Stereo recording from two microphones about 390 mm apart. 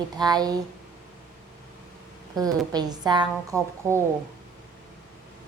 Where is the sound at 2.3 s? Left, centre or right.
Centre.